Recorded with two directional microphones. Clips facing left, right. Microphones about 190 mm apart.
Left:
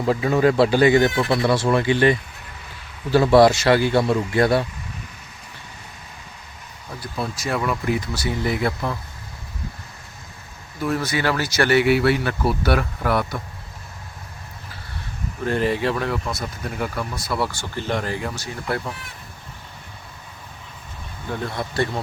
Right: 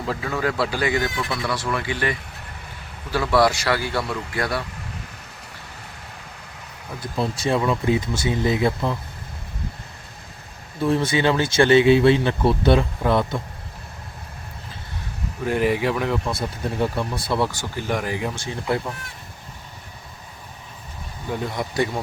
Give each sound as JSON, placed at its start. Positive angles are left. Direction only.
{"t": 0.1, "sound": "speech", "side_deg": 20}
{"t": 7.0, "sound": "speech", "side_deg": -25}
{"t": 10.8, "sound": "speech", "side_deg": -25}
{"t": 15.4, "sound": "speech", "side_deg": -15}
{"t": 16.3, "sound": "speech", "side_deg": -30}
{"t": 21.2, "sound": "speech", "side_deg": -15}